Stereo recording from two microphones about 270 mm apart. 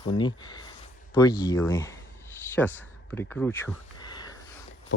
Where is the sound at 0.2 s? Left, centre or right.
Centre.